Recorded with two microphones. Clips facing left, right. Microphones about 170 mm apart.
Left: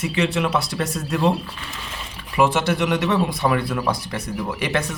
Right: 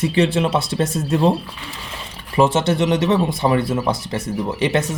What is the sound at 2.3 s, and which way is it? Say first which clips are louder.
Speech: right 3 dB; 25° right (ahead or behind).